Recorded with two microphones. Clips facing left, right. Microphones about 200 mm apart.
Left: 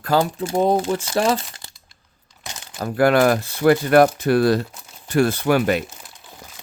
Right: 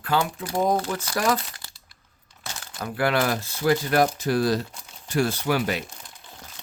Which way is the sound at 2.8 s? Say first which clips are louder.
Left 8 dB; 45° left (ahead or behind).